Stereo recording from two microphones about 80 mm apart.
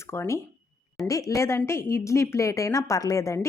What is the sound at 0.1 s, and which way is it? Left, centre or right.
A woman's voice, left.